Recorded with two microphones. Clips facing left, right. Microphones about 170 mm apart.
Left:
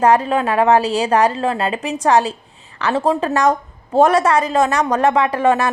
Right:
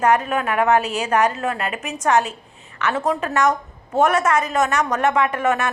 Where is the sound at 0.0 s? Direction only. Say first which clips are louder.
Left 4 dB; 30° left (ahead or behind).